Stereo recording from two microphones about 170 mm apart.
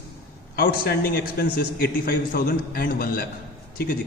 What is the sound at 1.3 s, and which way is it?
A man's voice, 65° left (ahead or behind).